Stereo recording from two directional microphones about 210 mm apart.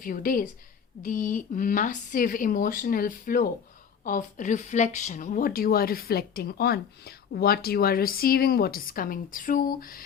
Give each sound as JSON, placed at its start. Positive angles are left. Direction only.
{"t": 0.0, "sound": "speech", "side_deg": 40}